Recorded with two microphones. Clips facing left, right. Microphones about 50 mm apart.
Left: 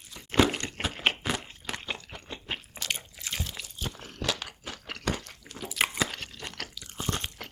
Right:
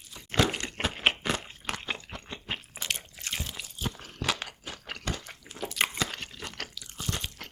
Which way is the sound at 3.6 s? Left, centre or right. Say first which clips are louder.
Right 2 dB; centre.